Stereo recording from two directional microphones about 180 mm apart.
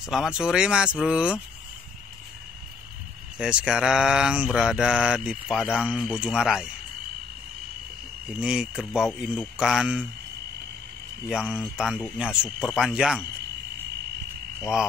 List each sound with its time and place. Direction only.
0.0 s speech: centre (ahead or behind)
3.3 s speech: 5° right (ahead or behind)
8.4 s speech: 5° right (ahead or behind)
11.2 s speech: 5° right (ahead or behind)